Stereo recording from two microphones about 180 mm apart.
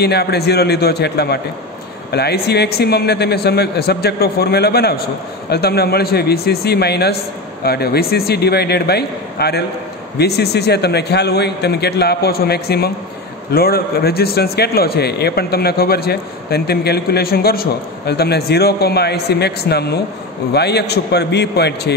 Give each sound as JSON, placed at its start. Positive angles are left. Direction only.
{"t": 0.0, "sound": "a man's voice", "side_deg": 65}